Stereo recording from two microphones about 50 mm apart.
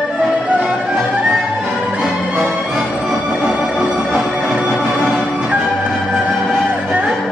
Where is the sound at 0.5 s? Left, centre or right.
Centre.